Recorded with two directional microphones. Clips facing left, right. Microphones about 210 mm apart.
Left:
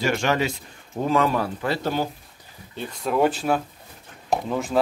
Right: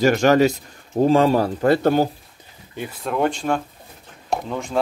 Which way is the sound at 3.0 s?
5° left (ahead or behind).